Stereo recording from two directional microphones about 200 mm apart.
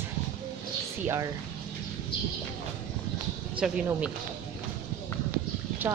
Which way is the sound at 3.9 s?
5° right (ahead or behind).